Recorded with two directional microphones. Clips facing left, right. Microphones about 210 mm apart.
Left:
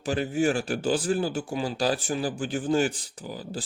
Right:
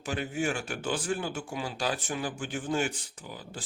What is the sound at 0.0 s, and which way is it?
A man's voice, 35° left (ahead or behind).